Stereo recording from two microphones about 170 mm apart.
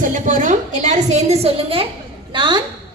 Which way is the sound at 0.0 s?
50° right (ahead or behind).